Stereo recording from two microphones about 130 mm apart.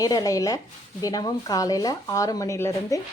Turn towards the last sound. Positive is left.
turn(degrees=25)  # may be behind; listen again after turning